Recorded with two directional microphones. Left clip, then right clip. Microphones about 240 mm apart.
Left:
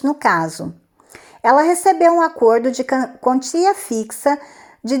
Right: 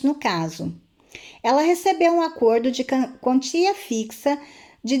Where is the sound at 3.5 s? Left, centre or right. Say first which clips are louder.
Left 5 dB; centre.